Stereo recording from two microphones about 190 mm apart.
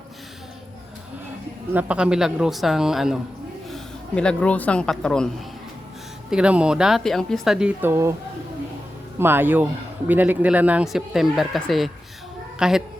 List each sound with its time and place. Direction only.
1.7 s speech: 5° right (ahead or behind)
6.3 s speech: 5° right (ahead or behind)
9.1 s speech: 10° right (ahead or behind)